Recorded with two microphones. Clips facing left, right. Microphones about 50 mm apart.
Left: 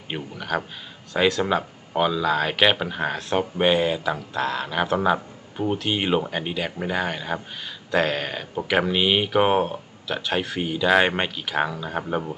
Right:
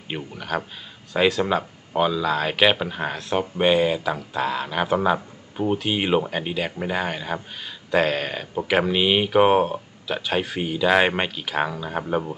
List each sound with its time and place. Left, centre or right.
0.1 s speech: centre